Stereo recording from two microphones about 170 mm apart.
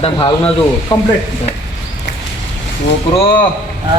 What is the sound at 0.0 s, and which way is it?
A man's voice, 30° left (ahead or behind).